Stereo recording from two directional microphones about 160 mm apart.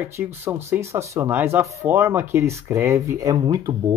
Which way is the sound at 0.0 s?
15° right (ahead or behind).